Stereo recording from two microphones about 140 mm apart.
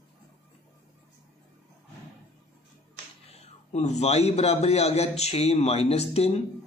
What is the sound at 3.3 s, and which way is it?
A man's voice, 50° left (ahead or behind).